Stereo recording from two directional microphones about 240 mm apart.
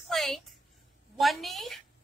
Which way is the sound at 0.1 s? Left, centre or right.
Centre.